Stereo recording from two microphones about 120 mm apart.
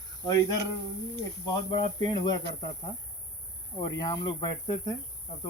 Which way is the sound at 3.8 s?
30° left (ahead or behind).